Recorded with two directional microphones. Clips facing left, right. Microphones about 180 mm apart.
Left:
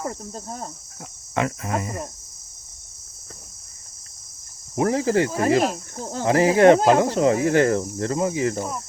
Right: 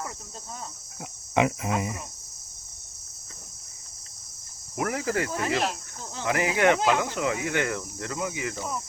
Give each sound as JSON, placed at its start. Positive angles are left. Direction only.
{"t": 0.0, "sound": "cricket", "side_deg": 45}
{"t": 1.4, "sound": "speech", "side_deg": -15}
{"t": 4.7, "sound": "speech", "side_deg": 30}
{"t": 5.4, "sound": "speech", "side_deg": 45}